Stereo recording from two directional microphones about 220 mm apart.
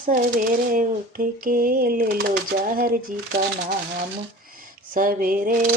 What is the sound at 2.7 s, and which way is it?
Speech, 40° right (ahead or behind).